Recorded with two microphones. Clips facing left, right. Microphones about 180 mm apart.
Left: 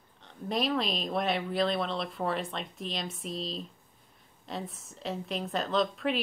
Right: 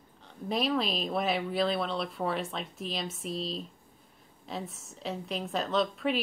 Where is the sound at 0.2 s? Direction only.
Centre (ahead or behind).